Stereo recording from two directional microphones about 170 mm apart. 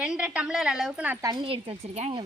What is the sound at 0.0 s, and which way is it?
A woman's voice, 5° right (ahead or behind).